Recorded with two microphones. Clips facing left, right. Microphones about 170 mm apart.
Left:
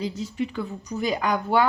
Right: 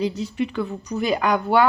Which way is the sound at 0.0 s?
65° right (ahead or behind).